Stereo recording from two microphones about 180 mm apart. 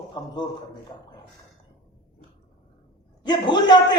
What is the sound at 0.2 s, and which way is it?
Speech, 20° left (ahead or behind).